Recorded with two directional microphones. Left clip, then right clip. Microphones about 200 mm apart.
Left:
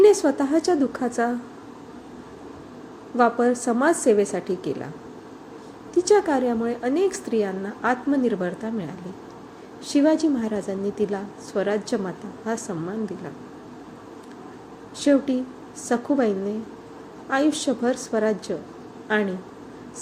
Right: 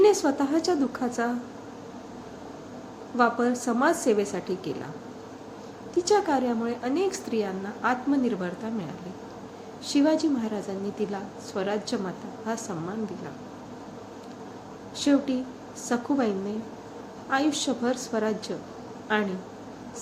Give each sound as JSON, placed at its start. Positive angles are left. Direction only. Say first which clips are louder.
{"t": 0.0, "sound": "a woman's voice", "louder": "left 4 dB", "side_deg": 15}
{"t": 3.2, "sound": "a woman's voice", "louder": "left 4 dB", "side_deg": 15}
{"t": 6.0, "sound": "a woman's voice", "louder": "left 4 dB", "side_deg": 15}
{"t": 14.9, "sound": "a woman's voice", "louder": "left 4 dB", "side_deg": 15}